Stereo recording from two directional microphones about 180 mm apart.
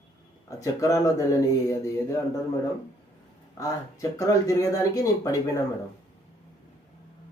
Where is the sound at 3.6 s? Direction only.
20° left (ahead or behind).